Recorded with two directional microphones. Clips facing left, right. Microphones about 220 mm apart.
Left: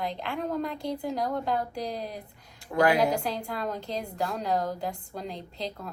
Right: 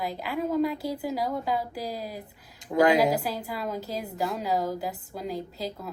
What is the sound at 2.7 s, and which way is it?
Speech, 20° right (ahead or behind).